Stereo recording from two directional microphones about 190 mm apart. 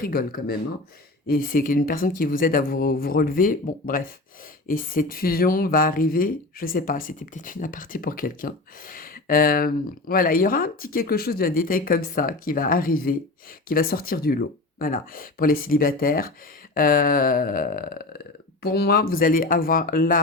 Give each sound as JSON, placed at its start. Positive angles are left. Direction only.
{"t": 0.0, "sound": "speech", "side_deg": 50}